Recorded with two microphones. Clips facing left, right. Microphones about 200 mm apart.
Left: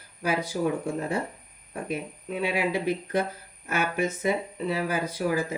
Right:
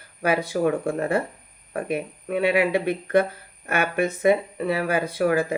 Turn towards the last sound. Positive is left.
turn(degrees=-60)  # may be behind; listen again after turning